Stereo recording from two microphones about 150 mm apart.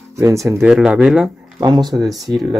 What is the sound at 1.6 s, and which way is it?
Speech, 25° right (ahead or behind).